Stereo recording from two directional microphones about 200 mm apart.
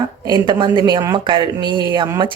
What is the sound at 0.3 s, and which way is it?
Speech, 20° right (ahead or behind).